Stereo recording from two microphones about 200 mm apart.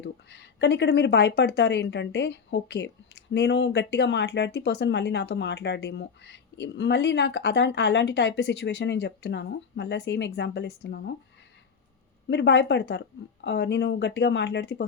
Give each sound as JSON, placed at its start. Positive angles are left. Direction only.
{"t": 0.0, "sound": "speech", "side_deg": 60}
{"t": 12.3, "sound": "speech", "side_deg": 60}